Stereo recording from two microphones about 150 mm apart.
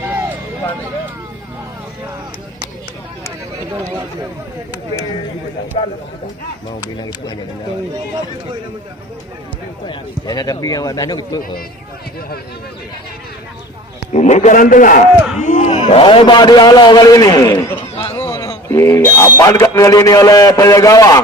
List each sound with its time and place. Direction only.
0.0 s a sound: 15° right (ahead or behind)
5.7 s a man's voice: 40° left (ahead or behind)
9.8 s a man's voice: 30° left (ahead or behind)
14.1 s a man's voice: 50° left (ahead or behind)
15.1 s speech: 5° right (ahead or behind)
15.4 s a man's voice: 55° left (ahead or behind); by 17.7 s 20° left (ahead or behind)
17.9 s a sound: 40° left (ahead or behind)
18.2 s a man's voice: 20° left (ahead or behind)